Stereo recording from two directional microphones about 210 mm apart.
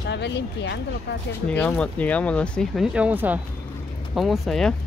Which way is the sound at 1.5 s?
5° left (ahead or behind).